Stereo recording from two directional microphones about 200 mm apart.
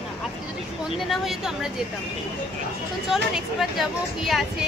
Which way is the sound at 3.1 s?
Centre (ahead or behind).